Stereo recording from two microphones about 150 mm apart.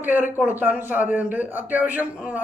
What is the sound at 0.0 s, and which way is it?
A man's voice, 10° right (ahead or behind).